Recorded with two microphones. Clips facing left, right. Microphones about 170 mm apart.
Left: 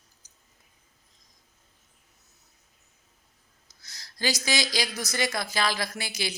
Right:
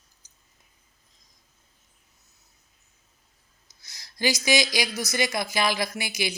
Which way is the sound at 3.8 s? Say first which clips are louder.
Right 3 dB; 15° right (ahead or behind).